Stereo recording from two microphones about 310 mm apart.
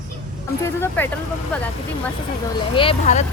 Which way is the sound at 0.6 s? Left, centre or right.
Centre.